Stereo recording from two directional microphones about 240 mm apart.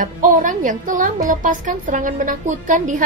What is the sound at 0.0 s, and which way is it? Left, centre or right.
A woman's voice, right.